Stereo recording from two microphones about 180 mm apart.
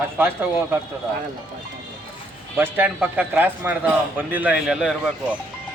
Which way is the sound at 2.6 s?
10° right (ahead or behind).